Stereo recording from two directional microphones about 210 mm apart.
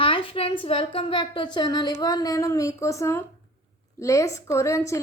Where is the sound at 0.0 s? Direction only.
25° left (ahead or behind).